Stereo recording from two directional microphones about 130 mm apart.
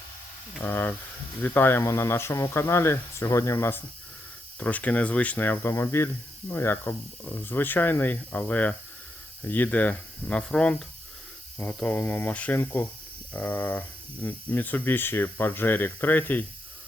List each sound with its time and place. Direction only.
0.6 s speech: 15° left (ahead or behind)